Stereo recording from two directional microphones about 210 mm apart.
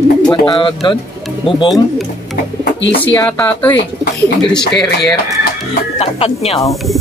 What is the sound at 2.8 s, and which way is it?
Speech, 60° left (ahead or behind).